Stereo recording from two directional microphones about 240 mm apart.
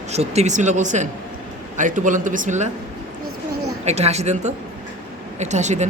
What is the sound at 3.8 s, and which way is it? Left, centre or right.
Speech, right.